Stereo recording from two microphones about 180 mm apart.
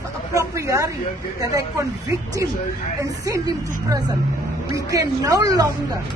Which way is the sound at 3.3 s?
20° right (ahead or behind).